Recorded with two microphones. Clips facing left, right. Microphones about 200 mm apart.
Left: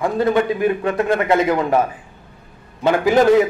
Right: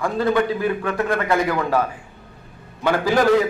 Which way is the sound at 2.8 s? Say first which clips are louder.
Left 4 dB; 20° left (ahead or behind).